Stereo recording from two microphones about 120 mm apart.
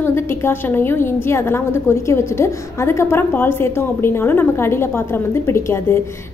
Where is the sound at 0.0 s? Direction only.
20° left (ahead or behind).